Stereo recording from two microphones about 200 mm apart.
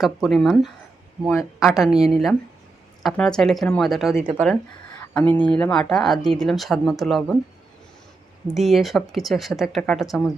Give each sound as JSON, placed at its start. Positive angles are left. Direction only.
{"t": 0.0, "sound": "speech", "side_deg": 0}
{"t": 1.3, "sound": "speech", "side_deg": 15}
{"t": 1.6, "sound": "speech", "side_deg": 0}
{"t": 8.4, "sound": "speech", "side_deg": 0}